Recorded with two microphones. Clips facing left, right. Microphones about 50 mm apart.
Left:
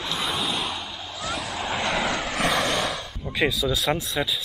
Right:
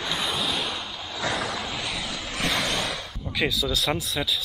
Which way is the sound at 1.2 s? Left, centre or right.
Right.